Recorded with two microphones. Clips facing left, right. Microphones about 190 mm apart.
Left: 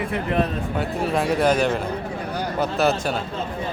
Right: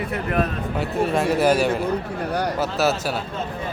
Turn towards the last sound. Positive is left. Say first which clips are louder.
# left 1 dB
turn(degrees=-5)  # may be behind; listen again after turning